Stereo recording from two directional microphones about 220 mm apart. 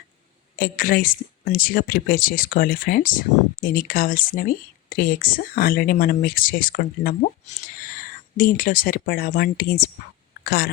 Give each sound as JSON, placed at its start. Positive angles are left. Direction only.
{"t": 0.6, "sound": "speech", "side_deg": 40}